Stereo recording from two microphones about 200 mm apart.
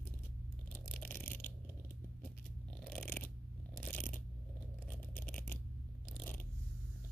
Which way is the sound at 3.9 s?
10° left (ahead or behind).